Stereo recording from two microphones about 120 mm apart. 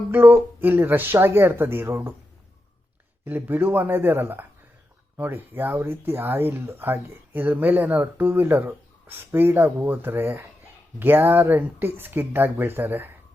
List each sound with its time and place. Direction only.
0.1 s speech: 15° right (ahead or behind)
3.2 s speech: 15° right (ahead or behind)